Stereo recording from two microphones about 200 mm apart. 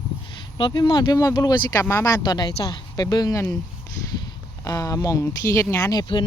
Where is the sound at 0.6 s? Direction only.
25° left (ahead or behind).